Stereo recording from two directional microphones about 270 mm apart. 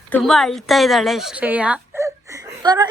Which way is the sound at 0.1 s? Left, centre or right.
Centre.